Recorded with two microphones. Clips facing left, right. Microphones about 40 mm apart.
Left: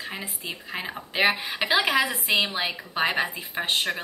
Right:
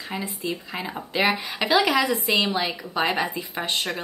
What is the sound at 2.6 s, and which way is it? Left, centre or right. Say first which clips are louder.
Speech: right 2 dB; centre.